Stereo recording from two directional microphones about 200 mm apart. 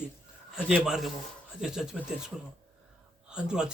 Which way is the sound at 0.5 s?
5° right (ahead or behind).